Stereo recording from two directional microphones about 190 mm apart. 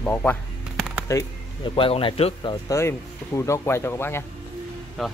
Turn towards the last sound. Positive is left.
turn(degrees=0)  # may be behind; listen again after turning